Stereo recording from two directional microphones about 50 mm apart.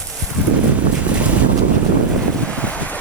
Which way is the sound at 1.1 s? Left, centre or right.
Right.